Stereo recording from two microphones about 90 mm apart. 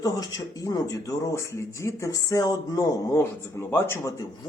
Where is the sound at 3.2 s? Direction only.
25° left (ahead or behind).